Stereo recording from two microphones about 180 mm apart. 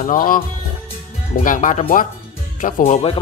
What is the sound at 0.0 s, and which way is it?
Speech, 50° left (ahead or behind).